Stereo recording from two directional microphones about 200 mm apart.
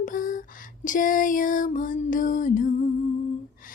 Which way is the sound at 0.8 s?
40° left (ahead or behind).